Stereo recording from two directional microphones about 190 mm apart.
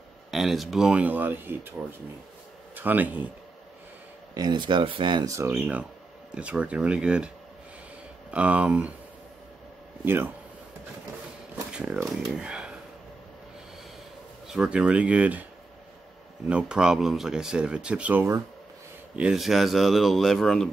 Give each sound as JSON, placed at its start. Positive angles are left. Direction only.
{"t": 0.3, "sound": "speech", "side_deg": 0}
{"t": 2.7, "sound": "speech", "side_deg": -10}
{"t": 4.3, "sound": "speech", "side_deg": -20}
{"t": 8.3, "sound": "speech", "side_deg": -5}
{"t": 10.0, "sound": "speech", "side_deg": -10}
{"t": 11.7, "sound": "speech", "side_deg": -5}
{"t": 12.4, "sound": "a sound", "side_deg": -5}
{"t": 14.5, "sound": "speech", "side_deg": -5}
{"t": 16.4, "sound": "speech", "side_deg": -5}